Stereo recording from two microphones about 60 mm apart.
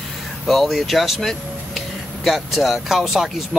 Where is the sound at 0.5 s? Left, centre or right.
Centre.